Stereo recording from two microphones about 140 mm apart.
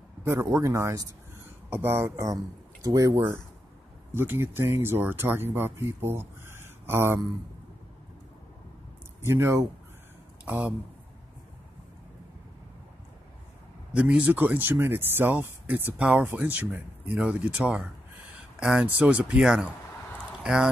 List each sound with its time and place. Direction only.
0.2 s speech: 20° right (ahead or behind)
4.1 s speech: 15° right (ahead or behind)
9.2 s speech: 20° right (ahead or behind)
13.9 s speech: 10° right (ahead or behind)